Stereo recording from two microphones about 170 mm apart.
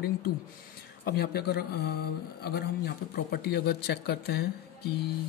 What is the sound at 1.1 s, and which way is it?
Speech, 70° left (ahead or behind).